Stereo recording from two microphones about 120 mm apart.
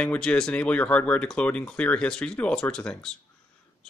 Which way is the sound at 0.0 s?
10° left (ahead or behind).